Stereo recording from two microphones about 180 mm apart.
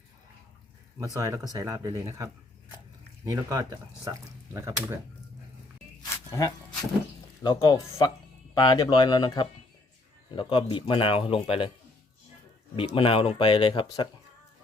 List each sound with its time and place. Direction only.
0.9 s speech: 20° right (ahead or behind)
6.0 s a sound: 20° left (ahead or behind)
7.4 s speech: 25° left (ahead or behind)
12.7 s speech: 30° left (ahead or behind)